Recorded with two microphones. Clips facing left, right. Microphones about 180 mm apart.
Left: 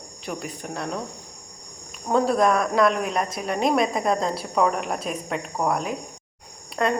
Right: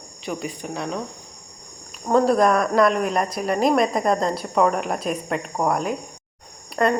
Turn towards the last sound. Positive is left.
turn(degrees=0)  # may be behind; listen again after turning